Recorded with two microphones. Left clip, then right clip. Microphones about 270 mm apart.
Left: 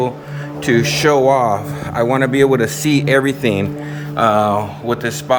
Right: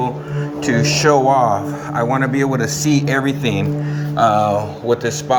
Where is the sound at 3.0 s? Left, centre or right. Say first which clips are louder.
Left 4 dB; centre.